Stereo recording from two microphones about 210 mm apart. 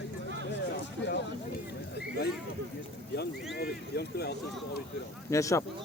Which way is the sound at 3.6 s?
50° left (ahead or behind).